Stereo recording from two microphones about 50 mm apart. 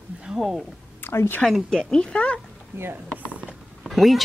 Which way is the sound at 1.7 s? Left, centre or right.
Centre.